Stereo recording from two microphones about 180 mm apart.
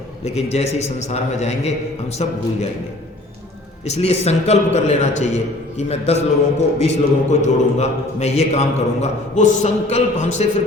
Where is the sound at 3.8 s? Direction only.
35° left (ahead or behind).